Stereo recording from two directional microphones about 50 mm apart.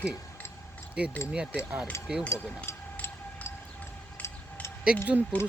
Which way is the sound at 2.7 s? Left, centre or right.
Left.